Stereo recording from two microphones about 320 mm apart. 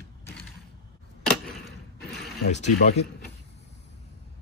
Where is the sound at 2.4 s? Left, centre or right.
Left.